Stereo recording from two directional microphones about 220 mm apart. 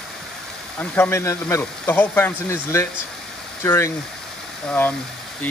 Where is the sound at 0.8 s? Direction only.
10° left (ahead or behind).